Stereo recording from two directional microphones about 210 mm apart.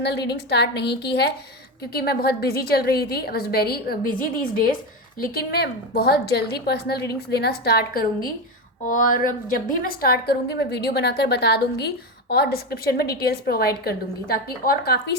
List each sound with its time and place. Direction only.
0.0 s a woman's voice: 50° left (ahead or behind)